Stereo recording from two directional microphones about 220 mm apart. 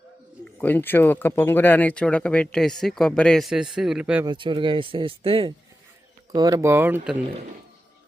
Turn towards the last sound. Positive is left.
turn(degrees=-10)  # may be behind; listen again after turning